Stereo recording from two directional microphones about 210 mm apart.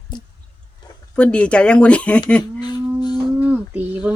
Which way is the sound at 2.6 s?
20° left (ahead or behind).